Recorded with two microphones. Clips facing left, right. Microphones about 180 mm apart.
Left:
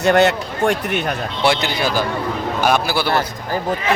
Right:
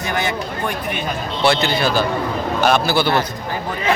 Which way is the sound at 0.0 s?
70° left (ahead or behind).